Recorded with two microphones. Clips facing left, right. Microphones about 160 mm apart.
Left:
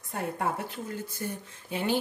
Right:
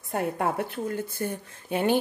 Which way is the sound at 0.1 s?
60° right (ahead or behind).